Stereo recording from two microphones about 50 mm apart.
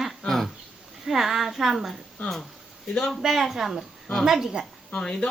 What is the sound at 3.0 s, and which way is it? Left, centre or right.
A man's voice, centre.